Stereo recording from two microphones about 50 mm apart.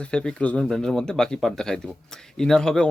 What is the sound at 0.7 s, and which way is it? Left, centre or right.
Speech, centre.